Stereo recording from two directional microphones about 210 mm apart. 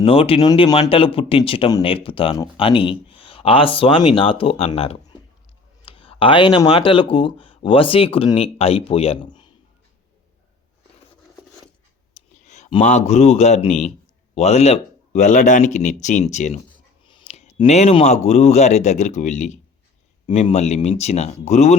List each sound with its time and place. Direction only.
0.0 s speech: 25° left (ahead or behind)
12.1 s speech: 35° left (ahead or behind)